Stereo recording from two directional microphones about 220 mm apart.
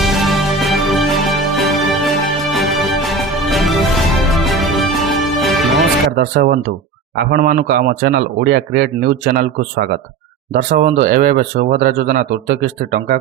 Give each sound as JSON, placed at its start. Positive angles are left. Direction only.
{"t": 0.0, "sound": "music", "side_deg": 0}
{"t": 6.1, "sound": "a man's voice", "side_deg": -40}